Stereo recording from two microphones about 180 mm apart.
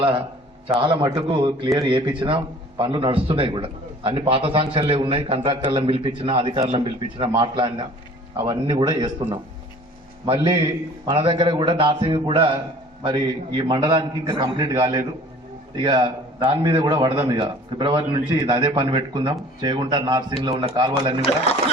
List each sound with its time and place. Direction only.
0.8 s a man's voice: 30° right (ahead or behind)
10.2 s a man's voice: 25° right (ahead or behind)